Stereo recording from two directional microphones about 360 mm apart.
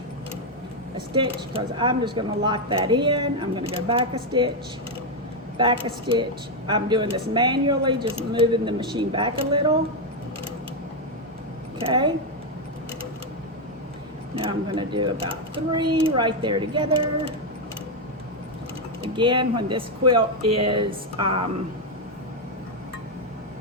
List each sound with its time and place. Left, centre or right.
0.9 s speech: centre
5.5 s speech: centre
11.8 s speech: centre
14.3 s speech: centre
19.0 s speech: centre